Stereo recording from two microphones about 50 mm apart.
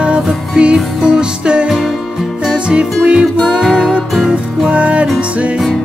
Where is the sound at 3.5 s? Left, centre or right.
Centre.